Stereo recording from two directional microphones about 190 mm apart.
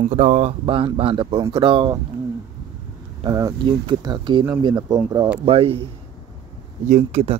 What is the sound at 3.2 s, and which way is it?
Speech, 20° right (ahead or behind).